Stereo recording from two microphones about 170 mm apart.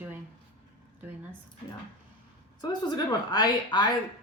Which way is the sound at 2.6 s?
25° left (ahead or behind).